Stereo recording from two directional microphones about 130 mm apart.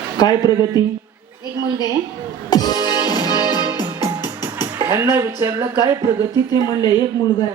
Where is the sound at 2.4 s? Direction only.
30° left (ahead or behind).